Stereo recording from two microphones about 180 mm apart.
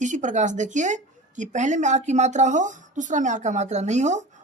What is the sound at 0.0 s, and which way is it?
A woman's voice, 45° right (ahead or behind).